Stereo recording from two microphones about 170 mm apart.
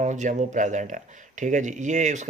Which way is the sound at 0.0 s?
45° right (ahead or behind).